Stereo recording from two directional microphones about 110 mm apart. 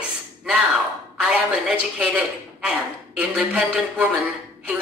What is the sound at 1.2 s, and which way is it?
Speech, 10° right (ahead or behind).